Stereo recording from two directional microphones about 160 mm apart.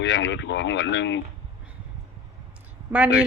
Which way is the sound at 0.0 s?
90° left.